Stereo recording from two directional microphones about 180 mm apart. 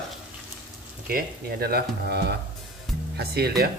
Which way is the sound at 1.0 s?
55° right (ahead or behind).